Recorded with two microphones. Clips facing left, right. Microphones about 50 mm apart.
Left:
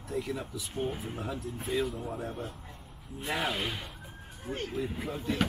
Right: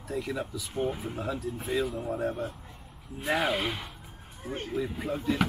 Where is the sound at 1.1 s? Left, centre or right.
Right.